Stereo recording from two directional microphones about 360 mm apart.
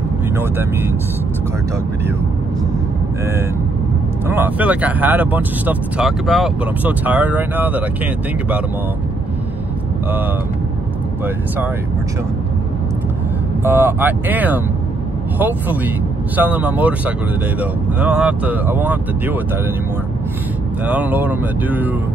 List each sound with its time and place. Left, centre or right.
0.4 s speech: centre
4.3 s speech: centre
13.7 s speech: centre
20.8 s speech: centre